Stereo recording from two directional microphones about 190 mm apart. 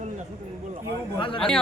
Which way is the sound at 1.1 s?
25° left (ahead or behind).